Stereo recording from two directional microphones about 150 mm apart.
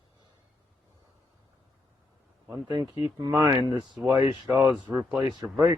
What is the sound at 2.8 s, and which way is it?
Speech, 35° left (ahead or behind).